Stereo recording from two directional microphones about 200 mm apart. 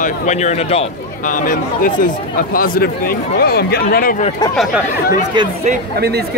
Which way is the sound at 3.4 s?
55° left (ahead or behind).